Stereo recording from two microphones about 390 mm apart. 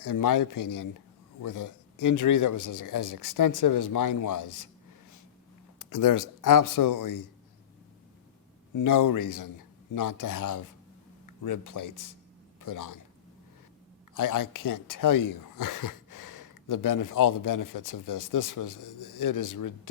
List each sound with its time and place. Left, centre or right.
0.0 s speech: left
5.8 s speech: left
8.7 s a man's voice: left
14.1 s speech: left